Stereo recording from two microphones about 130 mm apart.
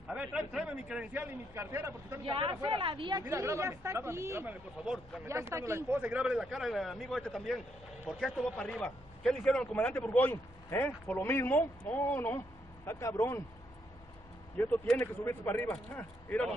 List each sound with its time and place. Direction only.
0.1 s a man's voice: 10° right (ahead or behind)
2.2 s speech: 45° right (ahead or behind)
3.3 s speech: 20° right (ahead or behind)
4.8 s a man's voice: centre (ahead or behind)
5.2 s a man's voice: 20° right (ahead or behind); by 13.4 s 20° left (ahead or behind)
14.6 s a man's voice: 15° left (ahead or behind)